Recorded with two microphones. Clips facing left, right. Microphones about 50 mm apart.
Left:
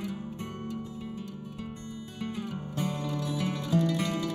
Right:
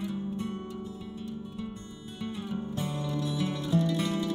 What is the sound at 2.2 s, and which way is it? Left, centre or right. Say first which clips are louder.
Music: even; left.